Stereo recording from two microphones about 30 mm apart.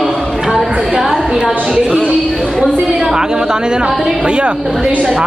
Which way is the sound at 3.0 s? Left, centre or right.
Right.